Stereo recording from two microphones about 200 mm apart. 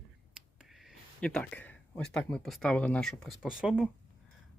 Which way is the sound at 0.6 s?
Centre (ahead or behind).